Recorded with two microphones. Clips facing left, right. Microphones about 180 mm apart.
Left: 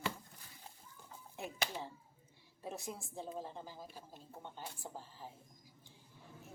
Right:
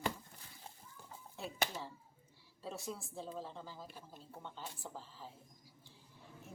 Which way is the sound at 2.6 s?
15° left (ahead or behind).